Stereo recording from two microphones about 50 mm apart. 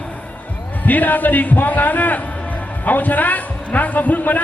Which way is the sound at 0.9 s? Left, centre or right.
Left.